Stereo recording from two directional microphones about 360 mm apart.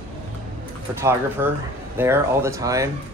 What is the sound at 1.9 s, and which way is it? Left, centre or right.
Speech, centre.